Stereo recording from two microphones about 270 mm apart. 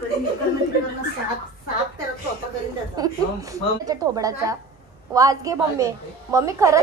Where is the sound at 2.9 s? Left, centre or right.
Centre.